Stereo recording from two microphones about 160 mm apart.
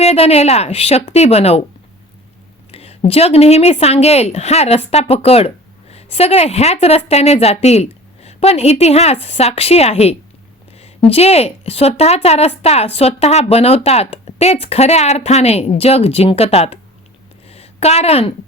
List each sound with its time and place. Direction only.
0.0 s a woman's voice: 40° left (ahead or behind)
2.7 s a woman's voice: 40° left (ahead or behind)